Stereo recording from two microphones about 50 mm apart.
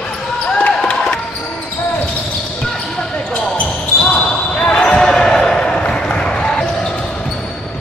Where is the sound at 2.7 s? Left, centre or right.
Left.